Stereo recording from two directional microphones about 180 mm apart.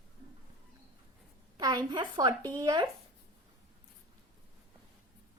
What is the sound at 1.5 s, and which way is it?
A woman's voice, 25° right (ahead or behind).